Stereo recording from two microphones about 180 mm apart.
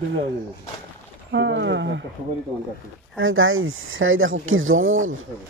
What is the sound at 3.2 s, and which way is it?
Speech, 90° right.